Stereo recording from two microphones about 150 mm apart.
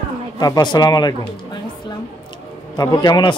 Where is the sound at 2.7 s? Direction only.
25° left (ahead or behind).